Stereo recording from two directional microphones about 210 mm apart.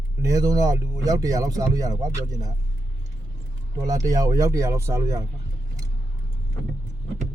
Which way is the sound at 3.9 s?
15° right (ahead or behind).